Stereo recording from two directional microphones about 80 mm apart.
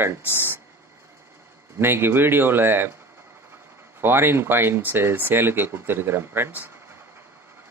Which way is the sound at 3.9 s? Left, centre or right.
Right.